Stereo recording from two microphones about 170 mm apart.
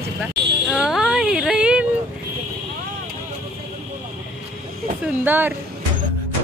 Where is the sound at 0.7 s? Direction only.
Centre (ahead or behind).